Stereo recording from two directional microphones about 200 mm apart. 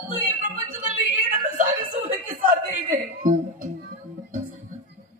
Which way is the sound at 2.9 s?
40° right (ahead or behind).